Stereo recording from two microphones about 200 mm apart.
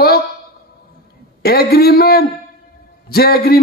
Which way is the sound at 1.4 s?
50° left (ahead or behind).